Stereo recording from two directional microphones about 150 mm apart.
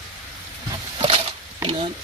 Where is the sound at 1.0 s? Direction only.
40° right (ahead or behind).